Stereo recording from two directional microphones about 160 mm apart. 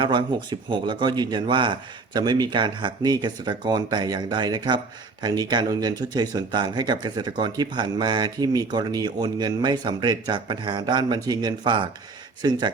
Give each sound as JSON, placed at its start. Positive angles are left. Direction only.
{"t": 0.0, "sound": "speech", "side_deg": -30}